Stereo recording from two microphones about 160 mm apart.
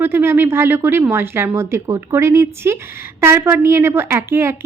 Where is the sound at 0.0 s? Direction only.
15° right (ahead or behind).